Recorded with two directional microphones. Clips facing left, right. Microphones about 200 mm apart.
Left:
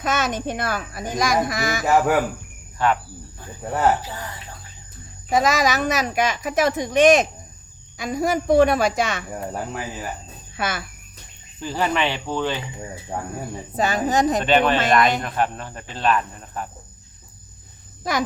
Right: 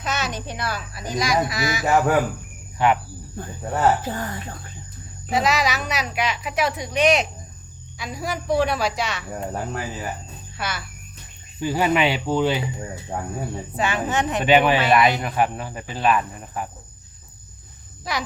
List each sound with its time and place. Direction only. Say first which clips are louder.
0.0 s a woman's voice: left 4 dB; 50° left (ahead or behind)
1.8 s speech: left 1 dB; centre (ahead or behind)
2.7 s cricket: right 1 dB; 15° right (ahead or behind)
4.0 s speech: right 6 dB; 50° right (ahead or behind)
5.3 s a woman's voice: left 2 dB; 45° left (ahead or behind)
9.3 s speech: right 1 dB; 5° left (ahead or behind)
10.6 s a woman's voice: left 4 dB; 50° left (ahead or behind)
11.6 s speech: right 3 dB; 10° right (ahead or behind)
13.7 s a woman's voice: left 3 dB; 40° left (ahead or behind)
14.4 s speech: right 1 dB; 10° right (ahead or behind)
18.0 s a woman's voice: left 4 dB; 50° left (ahead or behind)